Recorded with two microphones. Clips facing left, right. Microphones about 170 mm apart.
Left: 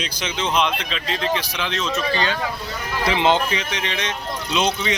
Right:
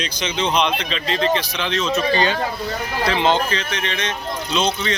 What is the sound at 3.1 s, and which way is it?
Speech, 15° left (ahead or behind).